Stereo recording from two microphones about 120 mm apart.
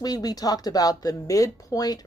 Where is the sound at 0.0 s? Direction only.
35° left (ahead or behind).